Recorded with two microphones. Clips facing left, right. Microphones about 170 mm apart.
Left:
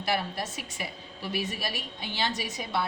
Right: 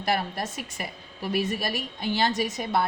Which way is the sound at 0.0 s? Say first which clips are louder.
Right 3 dB; 50° right (ahead or behind).